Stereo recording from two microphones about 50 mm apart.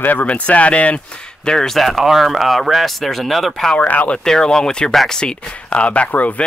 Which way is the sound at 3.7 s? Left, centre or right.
Left.